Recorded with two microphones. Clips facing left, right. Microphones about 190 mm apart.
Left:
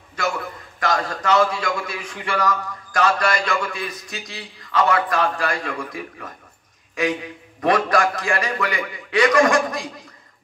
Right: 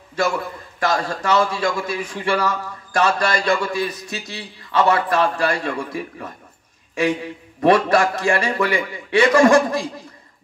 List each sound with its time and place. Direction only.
0.7 s a man's voice: 30° right (ahead or behind)
7.6 s a man's voice: 30° right (ahead or behind)